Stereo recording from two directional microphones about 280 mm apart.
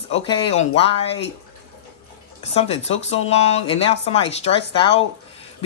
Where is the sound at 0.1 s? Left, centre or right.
Left.